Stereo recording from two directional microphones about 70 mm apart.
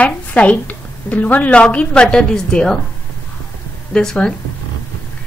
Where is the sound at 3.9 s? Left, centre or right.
Centre.